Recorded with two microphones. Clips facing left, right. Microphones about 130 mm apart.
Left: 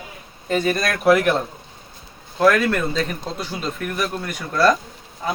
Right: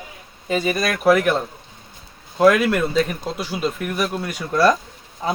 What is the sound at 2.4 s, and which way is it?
Speech, 15° right (ahead or behind).